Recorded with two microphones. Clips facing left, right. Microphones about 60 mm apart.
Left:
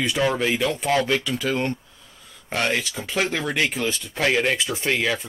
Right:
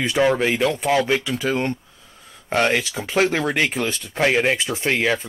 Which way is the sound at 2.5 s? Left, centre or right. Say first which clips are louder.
Right 4 dB; right.